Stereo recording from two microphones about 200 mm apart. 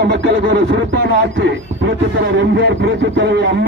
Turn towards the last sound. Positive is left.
turn(degrees=-60)  # may be behind; listen again after turning